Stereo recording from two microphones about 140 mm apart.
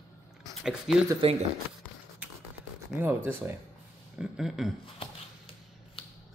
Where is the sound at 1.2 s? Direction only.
40° right (ahead or behind).